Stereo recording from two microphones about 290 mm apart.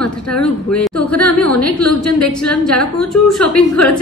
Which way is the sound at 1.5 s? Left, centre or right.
Left.